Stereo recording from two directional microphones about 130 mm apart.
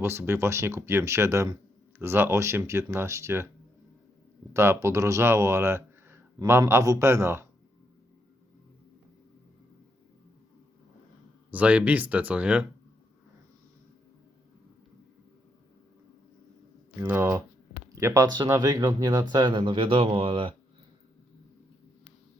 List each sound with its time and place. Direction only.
0.0 s speech: 20° right (ahead or behind)
4.5 s speech: 20° right (ahead or behind)
11.5 s speech: 10° right (ahead or behind)
16.9 s speech: 15° right (ahead or behind); by 20.6 s 40° right (ahead or behind)